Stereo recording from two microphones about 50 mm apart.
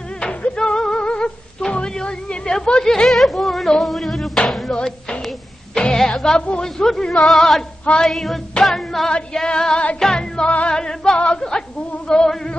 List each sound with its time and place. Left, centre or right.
0.2 s a sound: left
1.7 s music: centre
2.9 s music: centre
4.7 s music: centre
5.8 s a sound: centre
6.6 s speech: centre
8.0 s music: centre
9.3 s speech: centre
9.9 s music: centre
10.7 s speech: centre
11.1 s speech: left